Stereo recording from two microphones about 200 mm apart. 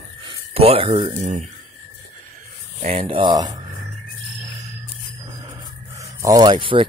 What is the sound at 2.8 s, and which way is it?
Speech, 30° right (ahead or behind).